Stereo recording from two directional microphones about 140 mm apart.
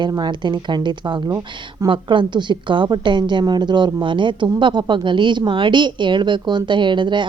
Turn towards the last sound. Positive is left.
turn(degrees=-35)  # may be behind; listen again after turning